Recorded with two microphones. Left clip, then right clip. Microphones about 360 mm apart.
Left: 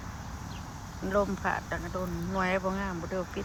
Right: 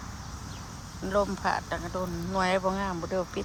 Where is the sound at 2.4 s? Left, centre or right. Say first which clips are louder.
Right 3 dB; centre.